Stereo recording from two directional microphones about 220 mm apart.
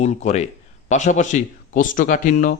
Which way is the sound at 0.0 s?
30° left (ahead or behind).